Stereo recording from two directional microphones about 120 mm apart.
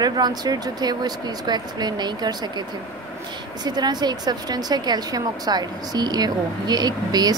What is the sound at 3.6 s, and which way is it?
Speech, 35° right (ahead or behind).